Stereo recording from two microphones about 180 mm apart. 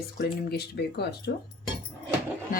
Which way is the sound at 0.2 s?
65° left (ahead or behind).